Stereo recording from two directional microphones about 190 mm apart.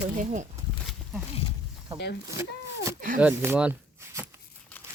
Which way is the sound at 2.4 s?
15° right (ahead or behind).